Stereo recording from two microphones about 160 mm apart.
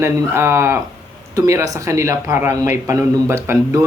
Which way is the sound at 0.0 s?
15° right (ahead or behind).